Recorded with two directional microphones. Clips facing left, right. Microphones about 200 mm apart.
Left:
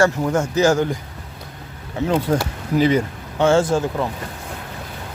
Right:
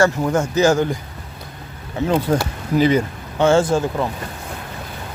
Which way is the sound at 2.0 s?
30° right (ahead or behind).